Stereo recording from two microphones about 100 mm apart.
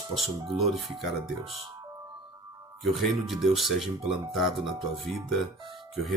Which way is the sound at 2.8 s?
Centre (ahead or behind).